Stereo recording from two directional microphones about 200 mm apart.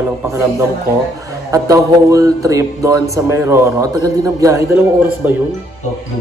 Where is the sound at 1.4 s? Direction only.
15° right (ahead or behind).